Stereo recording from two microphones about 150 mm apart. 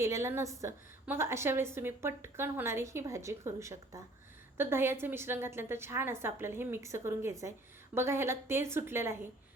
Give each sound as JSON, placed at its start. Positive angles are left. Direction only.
{"t": 0.0, "sound": "a woman's voice", "side_deg": -20}